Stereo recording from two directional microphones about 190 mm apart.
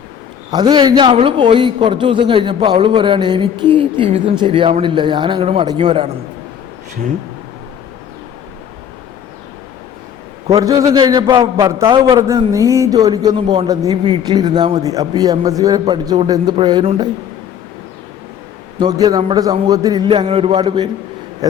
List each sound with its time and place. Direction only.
0.5 s a man's voice: 25° right (ahead or behind)
10.6 s a man's voice: 15° right (ahead or behind)
11.7 s a man's voice: 15° right (ahead or behind)
18.8 s a man's voice: 20° right (ahead or behind)